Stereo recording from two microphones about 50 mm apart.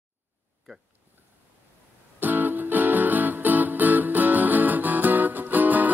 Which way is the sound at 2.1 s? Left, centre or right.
Right.